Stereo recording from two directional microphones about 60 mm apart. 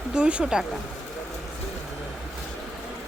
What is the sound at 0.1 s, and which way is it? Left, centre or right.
Speech, centre.